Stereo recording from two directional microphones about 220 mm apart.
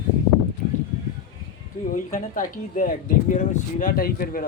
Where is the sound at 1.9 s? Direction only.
35° left (ahead or behind).